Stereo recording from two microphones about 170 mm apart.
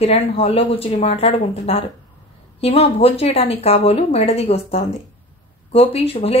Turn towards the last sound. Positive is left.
turn(degrees=35)  # may be behind; listen again after turning